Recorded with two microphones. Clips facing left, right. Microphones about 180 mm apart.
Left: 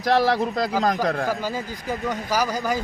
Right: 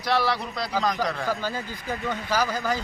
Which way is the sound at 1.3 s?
10° left (ahead or behind).